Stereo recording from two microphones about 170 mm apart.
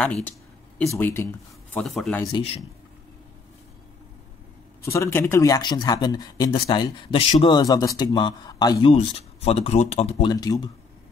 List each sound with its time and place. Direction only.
0.0 s speech: 5° left (ahead or behind)
1.8 s speech: centre (ahead or behind)
2.3 s speech: 35° left (ahead or behind)
4.8 s speech: 15° left (ahead or behind); by 7.5 s 35° left (ahead or behind)
7.5 s speech: 20° left (ahead or behind)
8.9 s speech: 35° left (ahead or behind)
10.2 s speech: 20° left (ahead or behind)